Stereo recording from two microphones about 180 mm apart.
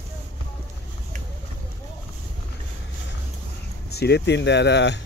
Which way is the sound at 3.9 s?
65° left (ahead or behind).